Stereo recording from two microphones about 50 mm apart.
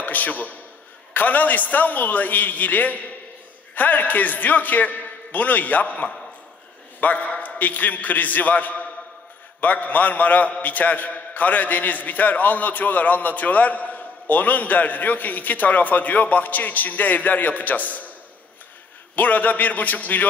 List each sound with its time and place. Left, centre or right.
0.0 s a man's voice: left
19.1 s a man's voice: left